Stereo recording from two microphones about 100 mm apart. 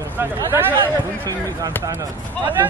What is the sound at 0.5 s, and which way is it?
Speech, 20° right (ahead or behind).